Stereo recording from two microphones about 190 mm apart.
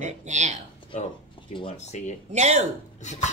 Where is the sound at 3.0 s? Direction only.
40° left (ahead or behind).